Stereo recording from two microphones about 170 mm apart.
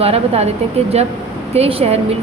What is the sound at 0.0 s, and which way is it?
Speech, 35° right (ahead or behind).